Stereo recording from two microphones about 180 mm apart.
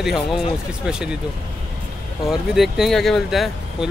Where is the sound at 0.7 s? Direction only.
5° right (ahead or behind).